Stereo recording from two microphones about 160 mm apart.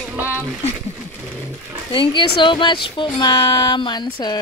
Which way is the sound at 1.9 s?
30° left (ahead or behind).